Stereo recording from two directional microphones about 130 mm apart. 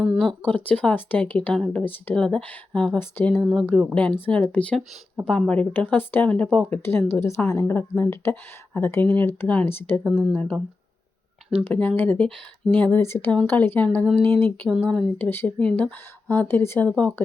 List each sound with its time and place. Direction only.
0.2 s speech: 10° left (ahead or behind)
3.4 s speech: centre (ahead or behind)
7.1 s speech: 20° left (ahead or behind)
14.7 s speech: 5° left (ahead or behind)